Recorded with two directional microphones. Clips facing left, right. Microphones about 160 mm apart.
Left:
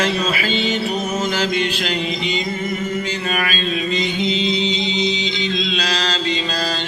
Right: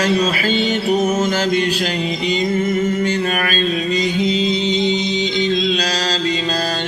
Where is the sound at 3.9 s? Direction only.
40° right (ahead or behind).